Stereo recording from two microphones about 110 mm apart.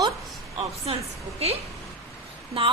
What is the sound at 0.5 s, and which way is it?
Speech, 60° right (ahead or behind).